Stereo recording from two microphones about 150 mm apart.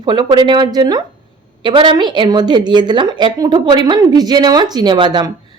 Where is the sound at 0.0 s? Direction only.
30° right (ahead or behind).